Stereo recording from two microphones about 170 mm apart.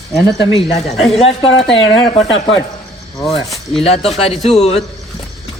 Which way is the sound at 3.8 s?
35° left (ahead or behind).